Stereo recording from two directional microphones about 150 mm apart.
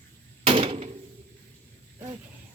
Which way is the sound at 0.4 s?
35° right (ahead or behind).